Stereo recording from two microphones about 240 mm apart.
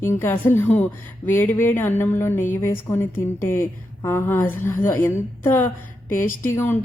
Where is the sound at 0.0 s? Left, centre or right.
Centre.